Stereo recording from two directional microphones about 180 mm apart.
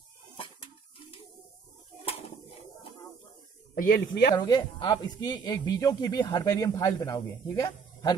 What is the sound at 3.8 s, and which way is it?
Speech, 55° left (ahead or behind).